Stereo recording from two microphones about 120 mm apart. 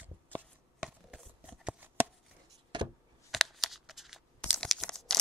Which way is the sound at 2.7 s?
40° right (ahead or behind).